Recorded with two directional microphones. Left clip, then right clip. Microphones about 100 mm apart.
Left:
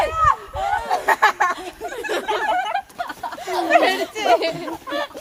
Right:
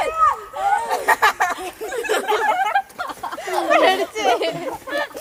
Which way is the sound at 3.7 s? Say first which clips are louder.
Right 1 dB; 30° left (ahead or behind).